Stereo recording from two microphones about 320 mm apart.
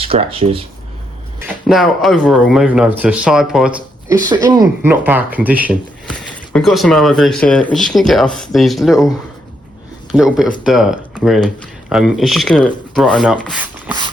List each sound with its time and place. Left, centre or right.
0.0 s speech: centre
1.4 s speech: centre